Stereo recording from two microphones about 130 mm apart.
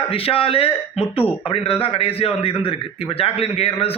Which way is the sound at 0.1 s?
45° left (ahead or behind).